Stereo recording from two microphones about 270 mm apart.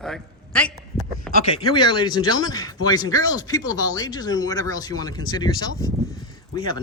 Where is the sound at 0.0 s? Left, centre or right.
Centre.